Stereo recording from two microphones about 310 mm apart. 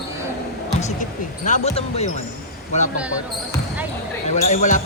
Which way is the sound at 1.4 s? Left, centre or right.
Left.